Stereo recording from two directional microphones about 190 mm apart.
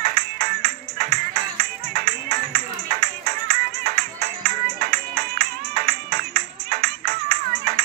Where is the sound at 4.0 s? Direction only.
50° right (ahead or behind).